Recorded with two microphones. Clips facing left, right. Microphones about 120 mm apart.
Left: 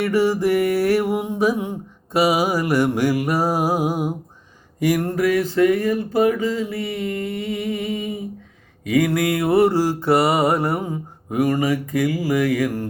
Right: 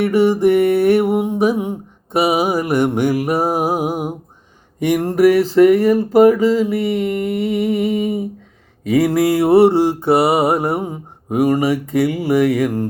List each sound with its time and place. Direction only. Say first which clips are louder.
0.0 s mantra: right 5 dB; 20° right (ahead or behind)
3.2 s music: right 3 dB; 20° right (ahead or behind)
4.8 s mantra: right 6 dB; 25° right (ahead or behind)
5.5 s a sound: right 6 dB; 30° right (ahead or behind)
8.9 s mantra: right 4 dB; 30° right (ahead or behind)